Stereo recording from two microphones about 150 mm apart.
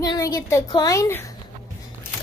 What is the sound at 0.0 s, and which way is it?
A woman's voice, 25° left (ahead or behind).